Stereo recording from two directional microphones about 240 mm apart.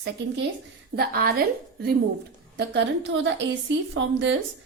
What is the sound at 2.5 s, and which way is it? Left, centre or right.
A woman's voice, right.